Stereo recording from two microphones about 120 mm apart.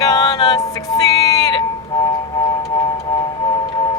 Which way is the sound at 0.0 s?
30° left (ahead or behind).